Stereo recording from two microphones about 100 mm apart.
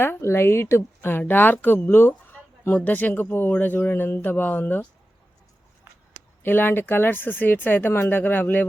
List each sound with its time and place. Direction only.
0.0 s speech: 25° left (ahead or behind)
6.4 s speech: 20° left (ahead or behind)